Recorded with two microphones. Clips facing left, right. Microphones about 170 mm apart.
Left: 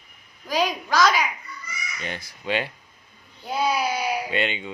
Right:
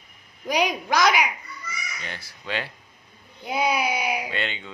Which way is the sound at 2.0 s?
20° left (ahead or behind).